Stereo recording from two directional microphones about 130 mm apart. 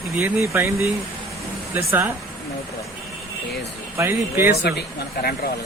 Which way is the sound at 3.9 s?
20° right (ahead or behind).